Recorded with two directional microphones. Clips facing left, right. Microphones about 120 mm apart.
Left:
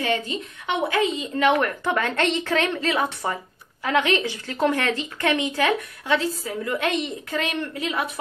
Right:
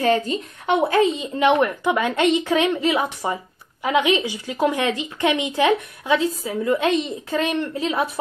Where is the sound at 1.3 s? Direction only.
20° right (ahead or behind).